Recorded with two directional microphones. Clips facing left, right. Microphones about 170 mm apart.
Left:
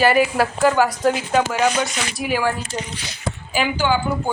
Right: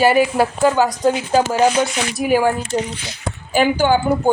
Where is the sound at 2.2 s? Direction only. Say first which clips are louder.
Right 6 dB; 45° right (ahead or behind).